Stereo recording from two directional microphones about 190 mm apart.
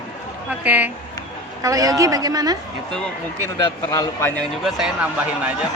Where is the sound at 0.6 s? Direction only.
10° right (ahead or behind).